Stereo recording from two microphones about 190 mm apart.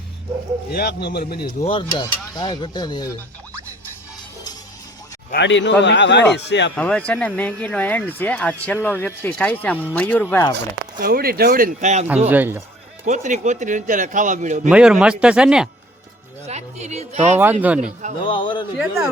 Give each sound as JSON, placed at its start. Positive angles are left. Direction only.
{"t": 0.7, "sound": "a man's voice", "side_deg": 55}
{"t": 1.5, "sound": "speech", "side_deg": 25}
{"t": 5.3, "sound": "speech", "side_deg": 70}
{"t": 6.7, "sound": "speech", "side_deg": 5}
{"t": 10.9, "sound": "speech", "side_deg": -50}
{"t": 12.3, "sound": "speech", "side_deg": -10}
{"t": 13.1, "sound": "speech", "side_deg": -40}
{"t": 14.7, "sound": "speech", "side_deg": -5}
{"t": 16.5, "sound": "speech", "side_deg": -35}
{"t": 17.3, "sound": "speech", "side_deg": -10}
{"t": 17.7, "sound": "speech", "side_deg": -40}
{"t": 18.2, "sound": "speech", "side_deg": 25}
{"t": 18.8, "sound": "speech", "side_deg": -5}